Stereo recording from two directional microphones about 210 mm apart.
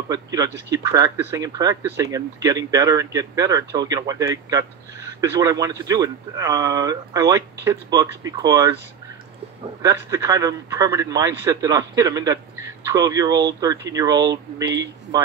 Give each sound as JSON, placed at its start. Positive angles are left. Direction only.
{"t": 0.1, "sound": "speech", "side_deg": -15}
{"t": 9.8, "sound": "speech", "side_deg": -15}